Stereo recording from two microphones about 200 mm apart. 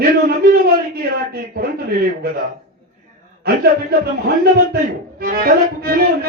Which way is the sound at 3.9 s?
50° right (ahead or behind).